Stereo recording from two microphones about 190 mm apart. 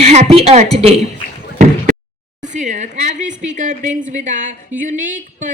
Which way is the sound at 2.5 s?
40° right (ahead or behind).